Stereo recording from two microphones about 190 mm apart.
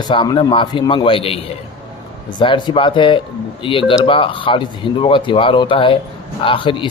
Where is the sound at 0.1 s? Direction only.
25° left (ahead or behind).